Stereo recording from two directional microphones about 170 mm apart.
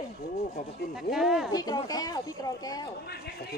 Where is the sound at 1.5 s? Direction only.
20° left (ahead or behind).